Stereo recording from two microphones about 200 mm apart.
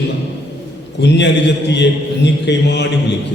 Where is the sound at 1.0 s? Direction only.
60° left (ahead or behind).